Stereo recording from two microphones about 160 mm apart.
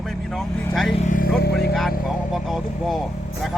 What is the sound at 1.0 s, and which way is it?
Vehicle, 55° left (ahead or behind).